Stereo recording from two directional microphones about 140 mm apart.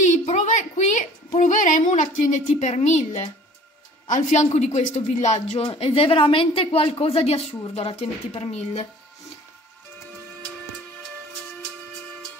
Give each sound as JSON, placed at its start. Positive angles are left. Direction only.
{"t": 0.0, "sound": "a woman's voice", "side_deg": 55}